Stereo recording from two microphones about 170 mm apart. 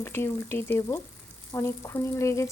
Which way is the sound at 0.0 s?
15° left (ahead or behind).